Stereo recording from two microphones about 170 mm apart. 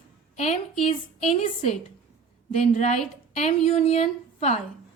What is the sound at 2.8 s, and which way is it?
A woman's voice, 40° left (ahead or behind).